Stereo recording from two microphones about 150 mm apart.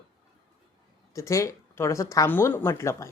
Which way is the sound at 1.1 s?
20° left (ahead or behind).